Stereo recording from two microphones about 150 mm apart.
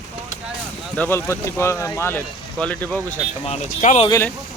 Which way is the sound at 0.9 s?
15° left (ahead or behind).